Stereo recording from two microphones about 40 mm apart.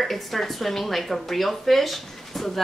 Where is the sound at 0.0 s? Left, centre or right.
Centre.